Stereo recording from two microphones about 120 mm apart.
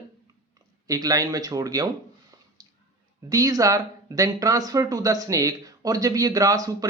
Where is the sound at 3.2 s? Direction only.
30° right (ahead or behind).